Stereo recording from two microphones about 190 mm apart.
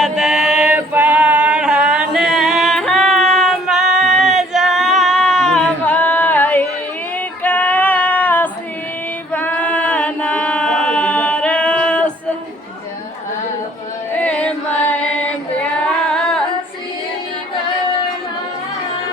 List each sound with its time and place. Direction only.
0.0 s singing: 5° right (ahead or behind)
7.2 s female singing: 10° left (ahead or behind)
9.3 s chant: 10° left (ahead or behind)
14.2 s chant: 5° left (ahead or behind)
15.5 s singing: 5° left (ahead or behind)